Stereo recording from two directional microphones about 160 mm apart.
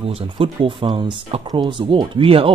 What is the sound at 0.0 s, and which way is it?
Speech, 35° right (ahead or behind).